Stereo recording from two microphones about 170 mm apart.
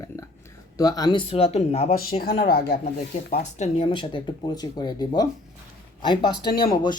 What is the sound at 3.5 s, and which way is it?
Speech, 40° left (ahead or behind).